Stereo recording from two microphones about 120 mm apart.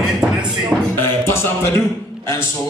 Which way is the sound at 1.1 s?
20° left (ahead or behind).